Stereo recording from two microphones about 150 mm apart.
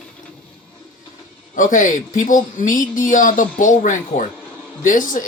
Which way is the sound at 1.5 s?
60° left (ahead or behind).